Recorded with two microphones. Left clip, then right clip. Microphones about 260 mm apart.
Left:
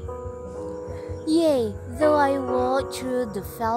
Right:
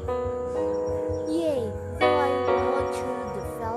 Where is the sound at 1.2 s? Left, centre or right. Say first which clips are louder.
Left 10 dB; left.